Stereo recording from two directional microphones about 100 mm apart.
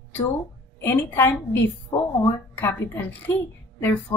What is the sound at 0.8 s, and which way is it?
Speech, 20° left (ahead or behind).